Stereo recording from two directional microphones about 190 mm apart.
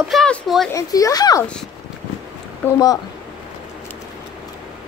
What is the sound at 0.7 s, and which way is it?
Speech, 20° left (ahead or behind).